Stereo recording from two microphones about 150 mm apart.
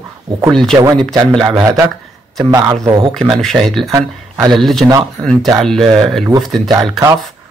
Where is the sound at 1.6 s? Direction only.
20° right (ahead or behind).